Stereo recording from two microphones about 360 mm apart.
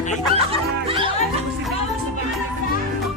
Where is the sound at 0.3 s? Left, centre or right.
Centre.